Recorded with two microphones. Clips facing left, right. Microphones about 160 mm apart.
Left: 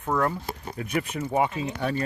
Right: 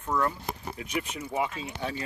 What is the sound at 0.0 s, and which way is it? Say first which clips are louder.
Speech: left 3 dB; 55° left (ahead or behind).